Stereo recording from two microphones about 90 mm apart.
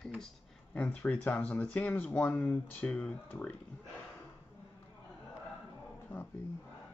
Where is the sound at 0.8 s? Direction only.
15° left (ahead or behind).